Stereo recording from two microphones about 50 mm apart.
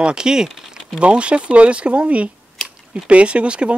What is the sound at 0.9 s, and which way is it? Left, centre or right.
Speech, right.